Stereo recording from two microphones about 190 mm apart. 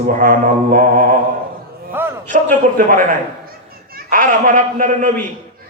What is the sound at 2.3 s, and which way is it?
Speech, 45° right (ahead or behind).